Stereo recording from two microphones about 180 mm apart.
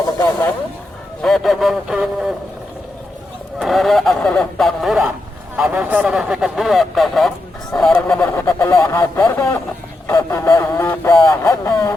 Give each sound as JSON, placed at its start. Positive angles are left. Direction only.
{"t": 1.2, "sound": "a man's voice", "side_deg": 0}
{"t": 3.6, "sound": "a man's voice", "side_deg": 0}
{"t": 8.3, "sound": "speech", "side_deg": 15}